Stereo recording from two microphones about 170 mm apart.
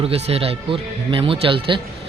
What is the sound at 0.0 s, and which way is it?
A man's voice, 35° right (ahead or behind).